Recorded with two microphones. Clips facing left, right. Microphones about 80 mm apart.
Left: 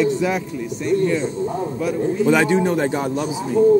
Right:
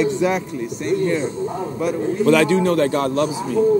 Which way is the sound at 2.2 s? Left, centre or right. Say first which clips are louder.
Right 2 dB; centre.